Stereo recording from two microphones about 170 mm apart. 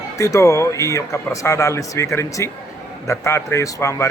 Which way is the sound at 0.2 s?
20° left (ahead or behind).